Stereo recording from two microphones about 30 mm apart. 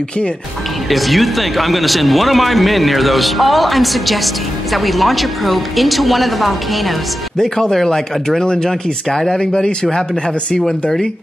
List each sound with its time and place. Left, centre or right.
0.8 s speech: centre
7.3 s speech: centre
9.4 s speech: left
10.6 s speech: centre